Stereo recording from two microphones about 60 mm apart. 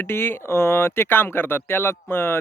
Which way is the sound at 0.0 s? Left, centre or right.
Left.